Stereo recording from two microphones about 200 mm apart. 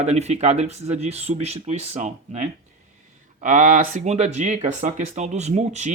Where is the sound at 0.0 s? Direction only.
35° right (ahead or behind).